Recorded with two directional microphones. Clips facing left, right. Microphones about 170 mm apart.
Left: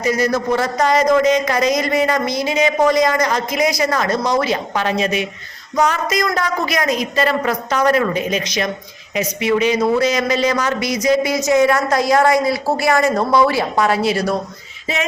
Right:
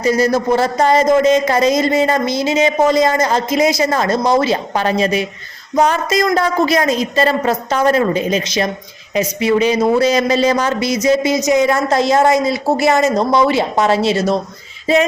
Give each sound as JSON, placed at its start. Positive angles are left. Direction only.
{"t": 0.0, "sound": "speech", "side_deg": -30}